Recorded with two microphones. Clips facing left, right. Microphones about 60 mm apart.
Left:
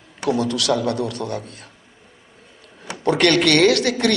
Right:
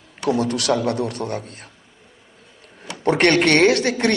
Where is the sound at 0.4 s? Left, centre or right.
Right.